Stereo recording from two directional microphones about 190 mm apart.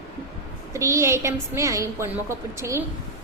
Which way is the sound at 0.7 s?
15° right (ahead or behind).